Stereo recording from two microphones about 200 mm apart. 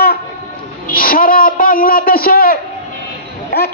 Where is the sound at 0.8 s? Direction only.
45° left (ahead or behind).